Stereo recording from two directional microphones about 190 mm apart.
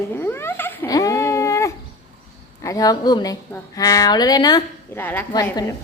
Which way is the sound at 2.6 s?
20° left (ahead or behind).